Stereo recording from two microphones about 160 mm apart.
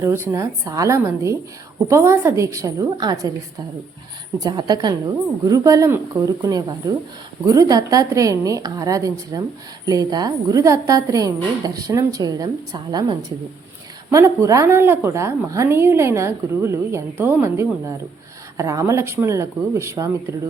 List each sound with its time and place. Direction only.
0.0 s a woman's voice: 15° right (ahead or behind)
4.4 s a woman's voice: 25° right (ahead or behind)